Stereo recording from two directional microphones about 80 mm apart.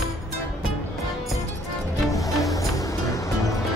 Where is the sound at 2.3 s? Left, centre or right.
Centre.